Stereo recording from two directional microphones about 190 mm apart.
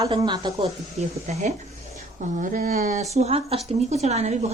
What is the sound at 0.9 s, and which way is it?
A woman's voice, 35° right (ahead or behind).